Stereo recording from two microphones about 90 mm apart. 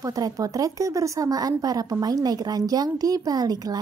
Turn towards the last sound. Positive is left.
turn(degrees=-45)  # may be behind; listen again after turning